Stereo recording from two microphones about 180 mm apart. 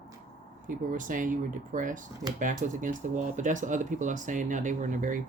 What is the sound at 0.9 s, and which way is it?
Speech, 45° right (ahead or behind).